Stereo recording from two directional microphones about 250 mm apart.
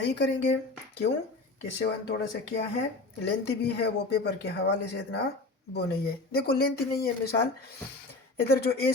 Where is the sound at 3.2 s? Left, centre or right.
Left.